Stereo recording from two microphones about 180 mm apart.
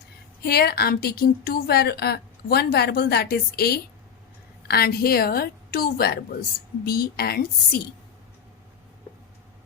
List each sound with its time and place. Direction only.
0.4 s a woman's voice: 60° left (ahead or behind)